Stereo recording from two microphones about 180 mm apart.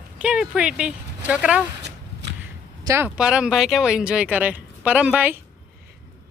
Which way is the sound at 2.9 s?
10° right (ahead or behind).